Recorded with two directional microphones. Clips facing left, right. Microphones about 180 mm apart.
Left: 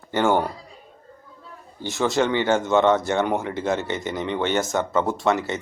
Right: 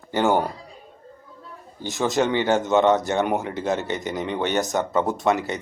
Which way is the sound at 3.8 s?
20° left (ahead or behind).